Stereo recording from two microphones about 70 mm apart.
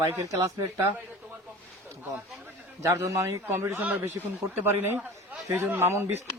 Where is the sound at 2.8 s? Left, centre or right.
Right.